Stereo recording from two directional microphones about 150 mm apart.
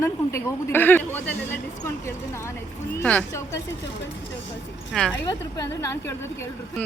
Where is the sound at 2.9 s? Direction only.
10° left (ahead or behind).